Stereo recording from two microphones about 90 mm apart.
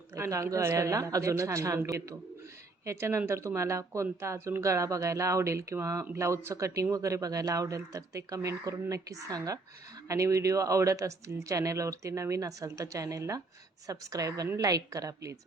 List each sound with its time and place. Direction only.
0.1 s speech: 35° right (ahead or behind)
2.8 s speech: 35° right (ahead or behind)